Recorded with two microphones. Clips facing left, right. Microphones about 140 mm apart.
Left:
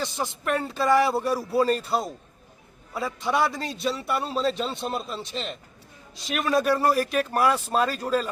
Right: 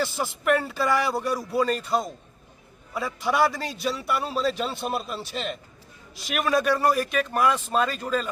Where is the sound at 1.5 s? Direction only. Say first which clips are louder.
Left 2 dB; 35° left (ahead or behind).